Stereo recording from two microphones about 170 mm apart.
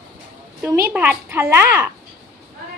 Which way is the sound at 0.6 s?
15° right (ahead or behind).